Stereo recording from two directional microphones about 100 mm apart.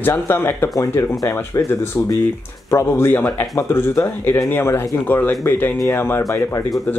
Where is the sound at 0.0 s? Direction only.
20° left (ahead or behind).